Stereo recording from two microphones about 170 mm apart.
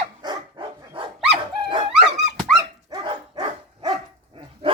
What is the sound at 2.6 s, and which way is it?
Dog, 25° right (ahead or behind).